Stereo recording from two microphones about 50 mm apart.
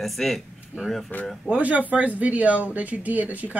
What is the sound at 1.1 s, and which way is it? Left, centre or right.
Speech, left.